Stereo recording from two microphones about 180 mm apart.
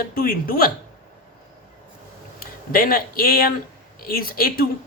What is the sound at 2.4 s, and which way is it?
A woman's voice, 55° left (ahead or behind).